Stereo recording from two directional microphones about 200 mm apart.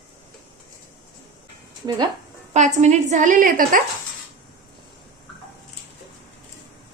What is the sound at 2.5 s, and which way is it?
A woman's voice, 35° right (ahead or behind).